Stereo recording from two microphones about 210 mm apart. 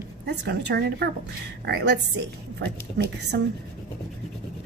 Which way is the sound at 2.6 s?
50° right (ahead or behind).